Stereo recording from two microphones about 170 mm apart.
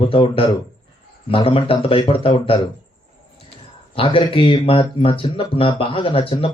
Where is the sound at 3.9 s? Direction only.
30° left (ahead or behind).